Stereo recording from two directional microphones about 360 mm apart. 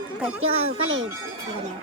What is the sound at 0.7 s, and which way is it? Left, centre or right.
Speech, right.